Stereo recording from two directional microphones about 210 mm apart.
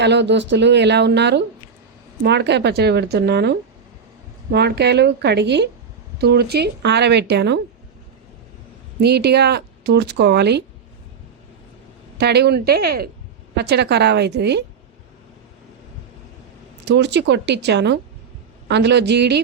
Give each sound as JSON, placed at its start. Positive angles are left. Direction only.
{"t": 0.0, "sound": "speech", "side_deg": -55}
{"t": 9.0, "sound": "speech", "side_deg": -50}
{"t": 12.1, "sound": "speech", "side_deg": -50}
{"t": 16.8, "sound": "speech", "side_deg": -55}